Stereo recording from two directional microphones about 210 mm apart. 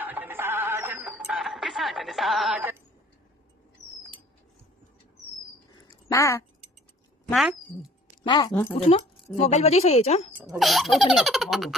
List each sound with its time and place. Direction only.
0.0 s music: 10° right (ahead or behind)
6.1 s speech: 15° left (ahead or behind)
7.3 s speech: centre (ahead or behind)
8.3 s speech: 20° left (ahead or behind)
9.4 s speech: 30° left (ahead or behind)
10.3 s speech: 5° right (ahead or behind)